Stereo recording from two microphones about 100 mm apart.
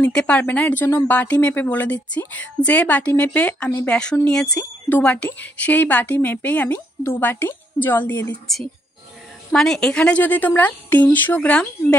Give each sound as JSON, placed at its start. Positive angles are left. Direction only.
{"t": 0.0, "sound": "a woman's voice", "side_deg": 10}
{"t": 9.5, "sound": "a woman's voice", "side_deg": 5}